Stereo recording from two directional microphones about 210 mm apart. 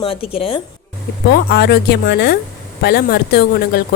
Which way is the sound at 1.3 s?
50° left (ahead or behind).